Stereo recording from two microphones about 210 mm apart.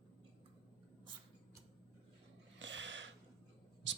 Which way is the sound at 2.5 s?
60° right (ahead or behind).